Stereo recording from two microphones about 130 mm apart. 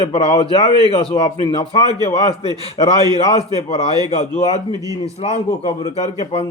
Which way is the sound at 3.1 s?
50° left (ahead or behind).